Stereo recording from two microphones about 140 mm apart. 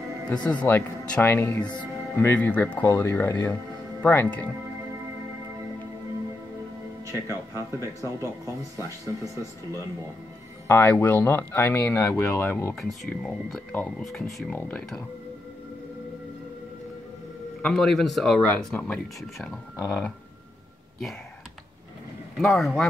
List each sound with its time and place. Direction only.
0.3 s speech: 10° left (ahead or behind)
7.1 s speech: 20° right (ahead or behind)
10.7 s speech: 15° left (ahead or behind)
12.7 s speech: centre (ahead or behind)
17.6 s speech: 5° left (ahead or behind)
22.4 s speech: centre (ahead or behind)